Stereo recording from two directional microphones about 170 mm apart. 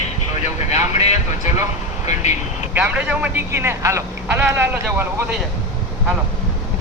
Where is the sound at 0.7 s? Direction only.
40° left (ahead or behind).